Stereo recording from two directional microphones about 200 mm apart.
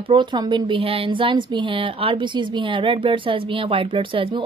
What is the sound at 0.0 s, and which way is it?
Speech, 25° right (ahead or behind).